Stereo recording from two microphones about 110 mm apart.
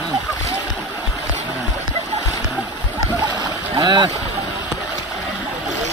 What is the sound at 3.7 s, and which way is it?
Boat, 45° right (ahead or behind).